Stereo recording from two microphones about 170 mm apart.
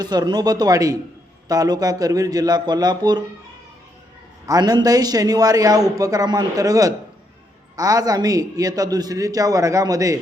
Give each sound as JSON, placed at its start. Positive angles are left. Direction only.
{"t": 0.0, "sound": "a man's voice", "side_deg": -25}
{"t": 4.4, "sound": "a man's voice", "side_deg": -20}